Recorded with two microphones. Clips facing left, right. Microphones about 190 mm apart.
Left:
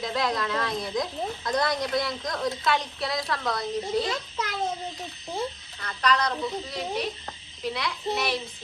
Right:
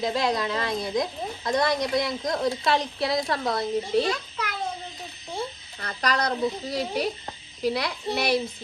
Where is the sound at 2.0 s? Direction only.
25° right (ahead or behind).